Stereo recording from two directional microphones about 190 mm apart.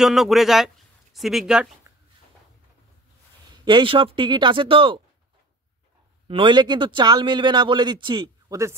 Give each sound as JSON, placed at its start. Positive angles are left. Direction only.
{"t": 0.0, "sound": "speech", "side_deg": 0}
{"t": 3.6, "sound": "a man's voice", "side_deg": -25}
{"t": 6.2, "sound": "a man's voice", "side_deg": -25}